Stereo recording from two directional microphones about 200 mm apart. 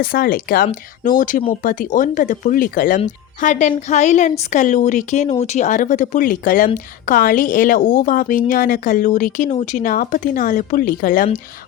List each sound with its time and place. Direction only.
0.0 s a woman's voice: 45° left (ahead or behind)